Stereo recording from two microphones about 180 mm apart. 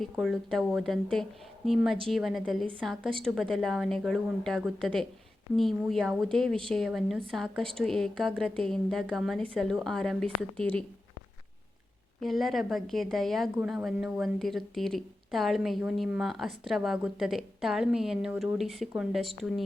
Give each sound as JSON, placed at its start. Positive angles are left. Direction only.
{"t": 0.0, "sound": "a woman's voice", "side_deg": 0}
{"t": 12.2, "sound": "a woman's voice", "side_deg": 0}